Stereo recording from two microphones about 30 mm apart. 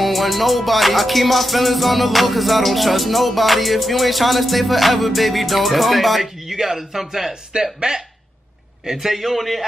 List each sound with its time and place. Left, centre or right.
0.0 s music: centre
7.8 s speech: right
8.9 s music: centre